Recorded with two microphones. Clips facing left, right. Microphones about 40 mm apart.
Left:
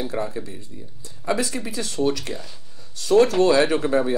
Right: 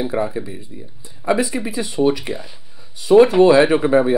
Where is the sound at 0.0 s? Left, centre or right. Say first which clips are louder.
Right 6 dB; centre.